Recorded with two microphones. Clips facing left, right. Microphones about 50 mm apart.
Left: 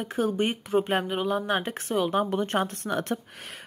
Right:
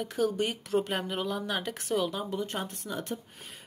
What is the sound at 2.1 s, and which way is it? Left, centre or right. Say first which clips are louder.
Speech: left 8 dB; left.